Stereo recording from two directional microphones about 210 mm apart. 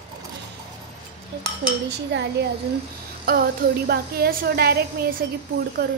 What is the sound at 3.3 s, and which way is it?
A woman's voice, 45° right (ahead or behind).